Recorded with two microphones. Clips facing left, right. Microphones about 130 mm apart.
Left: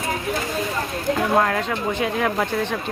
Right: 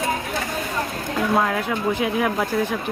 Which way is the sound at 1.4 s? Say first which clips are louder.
Left 1 dB; 5° right (ahead or behind).